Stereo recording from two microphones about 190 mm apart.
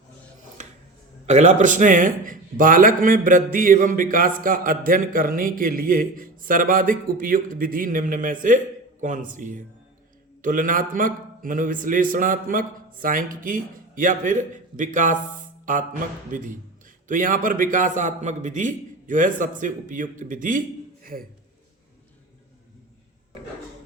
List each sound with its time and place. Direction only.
1.3 s speech: 40° right (ahead or behind)